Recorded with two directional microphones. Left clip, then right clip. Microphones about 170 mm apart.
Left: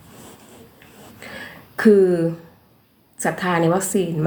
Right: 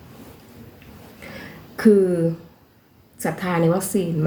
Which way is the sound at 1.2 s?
15° right (ahead or behind).